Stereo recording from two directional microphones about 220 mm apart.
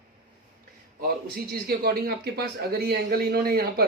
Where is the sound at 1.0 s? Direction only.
45° right (ahead or behind).